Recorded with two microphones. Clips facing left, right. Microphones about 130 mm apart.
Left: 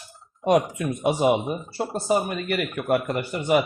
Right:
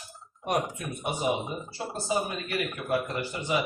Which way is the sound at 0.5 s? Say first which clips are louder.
Left 7 dB; 90° left.